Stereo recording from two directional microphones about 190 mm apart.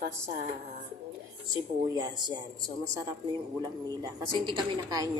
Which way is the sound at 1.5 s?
20° right (ahead or behind).